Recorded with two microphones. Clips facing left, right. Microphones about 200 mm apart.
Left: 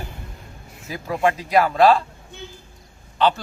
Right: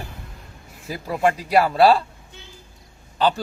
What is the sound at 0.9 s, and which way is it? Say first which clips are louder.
Speech: even; 35° right (ahead or behind).